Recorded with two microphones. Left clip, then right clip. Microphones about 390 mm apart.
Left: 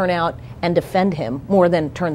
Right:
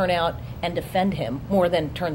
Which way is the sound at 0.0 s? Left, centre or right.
Left.